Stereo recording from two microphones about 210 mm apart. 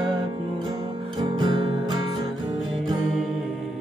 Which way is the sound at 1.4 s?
25° right (ahead or behind).